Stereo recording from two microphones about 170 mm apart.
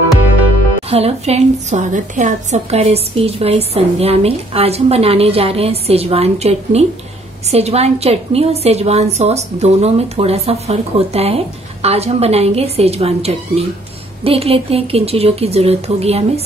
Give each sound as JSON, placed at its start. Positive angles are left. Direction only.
{"t": 0.8, "sound": "a woman's voice", "side_deg": -35}